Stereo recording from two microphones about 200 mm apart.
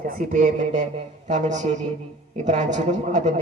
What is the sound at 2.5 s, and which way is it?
Speech, 35° right (ahead or behind).